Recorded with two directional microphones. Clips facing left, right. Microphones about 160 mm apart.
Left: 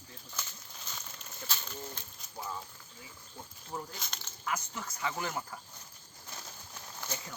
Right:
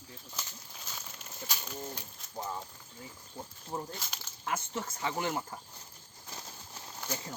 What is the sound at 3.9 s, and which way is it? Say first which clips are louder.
Speech: right 1 dB; 5° right (ahead or behind).